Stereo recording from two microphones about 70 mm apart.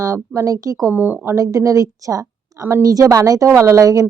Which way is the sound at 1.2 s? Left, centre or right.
Right.